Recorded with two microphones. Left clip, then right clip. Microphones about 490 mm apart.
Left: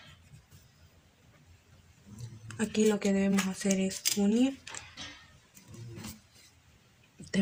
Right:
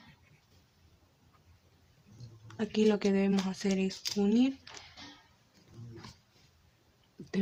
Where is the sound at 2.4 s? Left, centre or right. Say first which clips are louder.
Left 1 dB; right.